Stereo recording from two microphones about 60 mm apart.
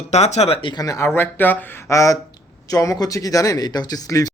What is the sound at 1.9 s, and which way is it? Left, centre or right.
Speech, left.